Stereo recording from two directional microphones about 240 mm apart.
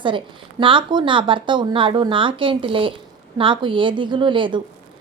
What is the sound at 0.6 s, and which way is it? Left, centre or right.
A woman's voice, centre.